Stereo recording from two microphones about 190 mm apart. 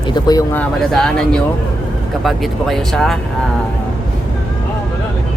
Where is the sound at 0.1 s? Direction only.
20° left (ahead or behind).